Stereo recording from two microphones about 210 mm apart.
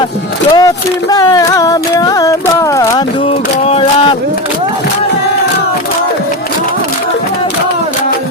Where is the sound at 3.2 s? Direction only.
30° left (ahead or behind).